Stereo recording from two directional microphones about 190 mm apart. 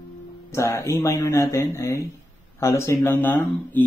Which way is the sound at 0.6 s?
15° left (ahead or behind).